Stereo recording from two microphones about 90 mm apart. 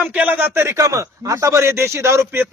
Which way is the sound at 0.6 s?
35° right (ahead or behind).